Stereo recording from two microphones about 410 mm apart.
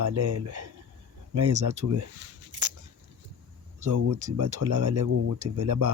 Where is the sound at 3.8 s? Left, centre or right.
Right.